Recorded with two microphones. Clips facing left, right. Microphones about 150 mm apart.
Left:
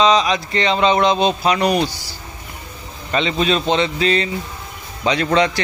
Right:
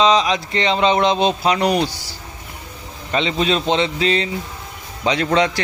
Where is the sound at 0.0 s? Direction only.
25° right (ahead or behind).